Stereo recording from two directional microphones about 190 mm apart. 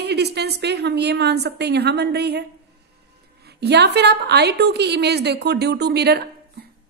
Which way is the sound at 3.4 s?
60° right (ahead or behind).